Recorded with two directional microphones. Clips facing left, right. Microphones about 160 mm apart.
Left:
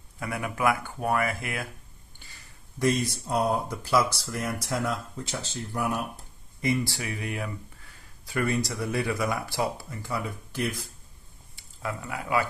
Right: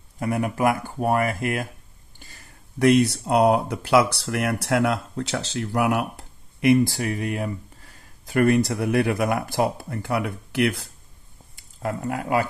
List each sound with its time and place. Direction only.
0.2 s speech: 40° right (ahead or behind)
2.2 s a sound: 50° right (ahead or behind)
2.8 s speech: 70° right (ahead or behind)
6.9 s speech: 45° right (ahead or behind); by 10.9 s 70° right (ahead or behind)
11.5 s speech: 45° right (ahead or behind)